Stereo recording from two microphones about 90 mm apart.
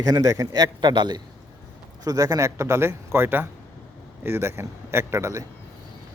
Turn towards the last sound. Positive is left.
turn(degrees=-30)  # may be behind; listen again after turning